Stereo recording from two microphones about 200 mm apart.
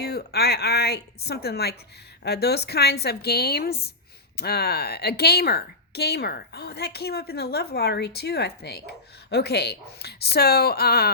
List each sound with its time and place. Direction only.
0.0 s a woman's voice: 55° left (ahead or behind)